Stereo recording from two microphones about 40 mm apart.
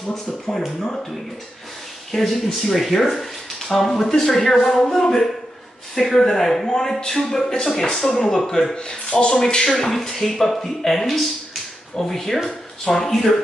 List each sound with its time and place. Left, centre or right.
0.5 s speech: centre
2.1 s speech: centre
8.7 s speech: left
9.3 s speech: centre